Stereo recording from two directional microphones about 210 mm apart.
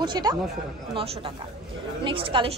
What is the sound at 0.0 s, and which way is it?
Speech, 20° right (ahead or behind).